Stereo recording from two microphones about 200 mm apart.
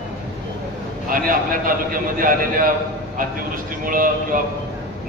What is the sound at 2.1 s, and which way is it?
Speech, 45° right (ahead or behind).